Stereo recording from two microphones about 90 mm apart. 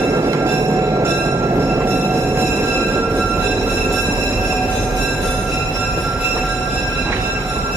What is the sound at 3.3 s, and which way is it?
Music, 25° right (ahead or behind).